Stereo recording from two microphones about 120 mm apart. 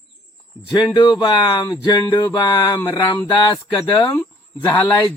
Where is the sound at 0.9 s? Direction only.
40° left (ahead or behind).